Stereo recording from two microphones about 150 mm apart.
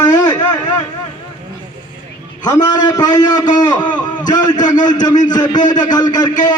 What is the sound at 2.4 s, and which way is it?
A man's voice, 25° left (ahead or behind).